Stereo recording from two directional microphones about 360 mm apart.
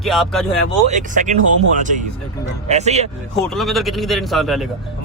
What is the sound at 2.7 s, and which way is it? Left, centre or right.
Speech, centre.